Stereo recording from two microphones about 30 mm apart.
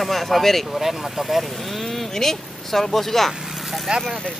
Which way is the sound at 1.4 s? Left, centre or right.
Centre.